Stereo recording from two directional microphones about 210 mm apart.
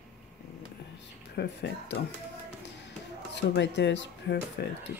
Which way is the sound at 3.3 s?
55° left (ahead or behind).